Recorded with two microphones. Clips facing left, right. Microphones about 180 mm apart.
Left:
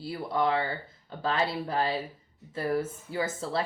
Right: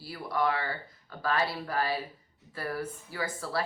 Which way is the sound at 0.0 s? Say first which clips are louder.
Left 2 dB; 25° left (ahead or behind).